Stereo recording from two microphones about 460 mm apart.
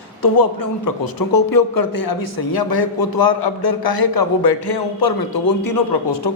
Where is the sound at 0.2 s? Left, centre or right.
Left.